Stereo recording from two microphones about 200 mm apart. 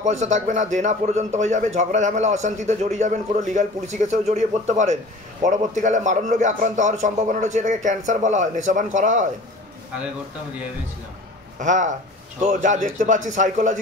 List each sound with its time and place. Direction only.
0.0 s a man's voice: 35° right (ahead or behind)
11.6 s a man's voice: 35° right (ahead or behind)